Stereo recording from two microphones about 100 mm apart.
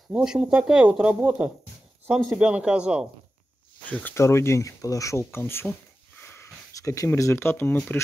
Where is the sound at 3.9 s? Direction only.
20° left (ahead or behind).